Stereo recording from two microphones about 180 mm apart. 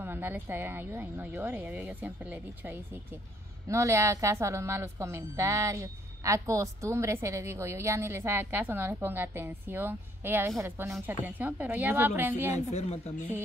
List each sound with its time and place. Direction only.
0.0 s a woman's voice: 10° right (ahead or behind)
12.7 s speech: 35° left (ahead or behind)